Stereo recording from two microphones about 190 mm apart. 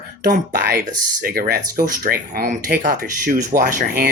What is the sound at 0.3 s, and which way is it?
Speech, 45° right (ahead or behind).